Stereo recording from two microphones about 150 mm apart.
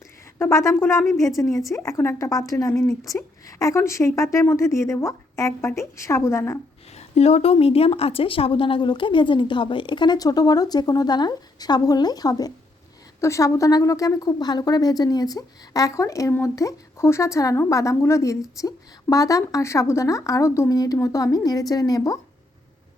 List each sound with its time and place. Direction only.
0.3 s speech: 15° left (ahead or behind)
6.9 s a woman's voice: 45° left (ahead or behind); by 22.2 s 25° left (ahead or behind)